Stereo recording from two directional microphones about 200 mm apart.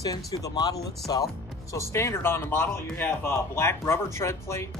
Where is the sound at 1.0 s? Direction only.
Centre (ahead or behind).